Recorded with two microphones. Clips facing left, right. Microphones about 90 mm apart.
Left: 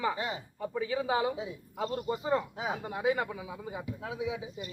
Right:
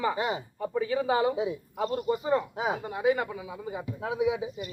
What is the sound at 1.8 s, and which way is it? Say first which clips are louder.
A woman's voice: right 4 dB; 20° right (ahead or behind).